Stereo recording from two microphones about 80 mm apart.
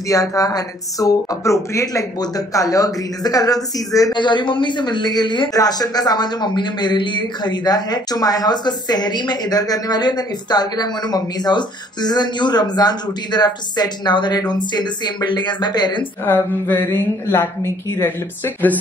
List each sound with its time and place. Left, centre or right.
0.1 s speech: left
4.1 s speech: left
16.3 s a woman's voice: left